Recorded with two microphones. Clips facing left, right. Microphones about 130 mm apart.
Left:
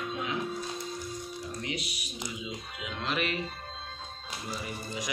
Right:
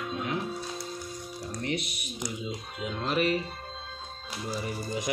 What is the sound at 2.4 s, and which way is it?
Speech, 40° right (ahead or behind).